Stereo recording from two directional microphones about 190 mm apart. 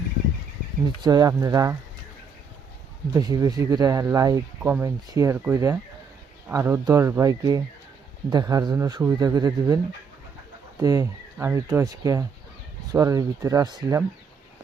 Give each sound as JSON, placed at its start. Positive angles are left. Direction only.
{"t": 1.0, "sound": "speech", "side_deg": -20}
{"t": 3.1, "sound": "speech", "side_deg": -20}